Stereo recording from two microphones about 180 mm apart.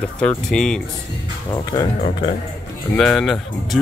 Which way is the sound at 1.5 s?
20° left (ahead or behind).